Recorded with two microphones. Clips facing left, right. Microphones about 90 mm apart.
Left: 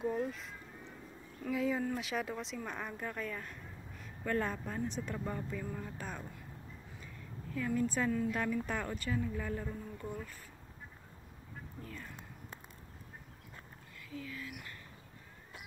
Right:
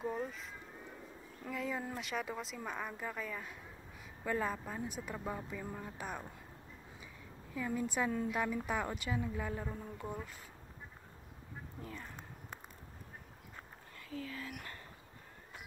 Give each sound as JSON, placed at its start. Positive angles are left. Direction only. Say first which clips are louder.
{"t": 0.0, "sound": "a woman's voice", "louder": "left 3 dB", "side_deg": 0}
{"t": 7.5, "sound": "a woman's voice", "louder": "left 2 dB", "side_deg": -15}
{"t": 13.9, "sound": "speech", "louder": "right 1 dB", "side_deg": -35}